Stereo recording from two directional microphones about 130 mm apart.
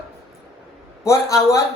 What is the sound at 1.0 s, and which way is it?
Speech, 20° left (ahead or behind).